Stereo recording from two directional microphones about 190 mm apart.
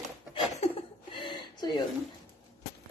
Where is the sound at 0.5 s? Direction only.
30° left (ahead or behind).